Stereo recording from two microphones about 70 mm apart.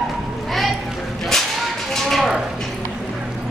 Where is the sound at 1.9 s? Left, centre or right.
Centre.